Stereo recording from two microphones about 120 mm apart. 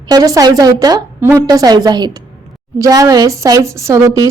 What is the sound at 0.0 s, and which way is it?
A woman's voice, 35° right (ahead or behind).